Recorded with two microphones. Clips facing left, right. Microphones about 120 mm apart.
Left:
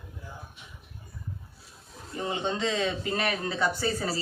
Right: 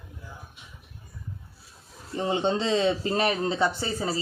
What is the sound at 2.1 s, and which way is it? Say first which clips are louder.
Speech: right 5 dB; 30° right (ahead or behind).